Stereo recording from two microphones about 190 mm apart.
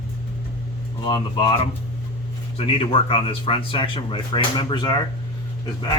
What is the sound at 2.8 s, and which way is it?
Speech, 30° left (ahead or behind).